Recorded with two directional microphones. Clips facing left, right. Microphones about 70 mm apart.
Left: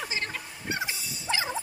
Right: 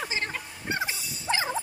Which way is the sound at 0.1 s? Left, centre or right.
Right.